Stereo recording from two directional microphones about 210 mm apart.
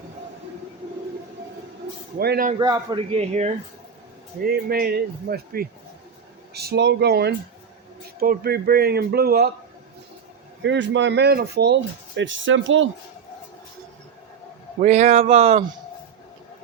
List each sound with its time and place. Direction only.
2.1 s speech: 45° right (ahead or behind)
2.6 s speech: 20° right (ahead or behind)
4.4 s speech: 45° right (ahead or behind)
10.6 s speech: 60° right (ahead or behind)
14.8 s speech: 35° right (ahead or behind)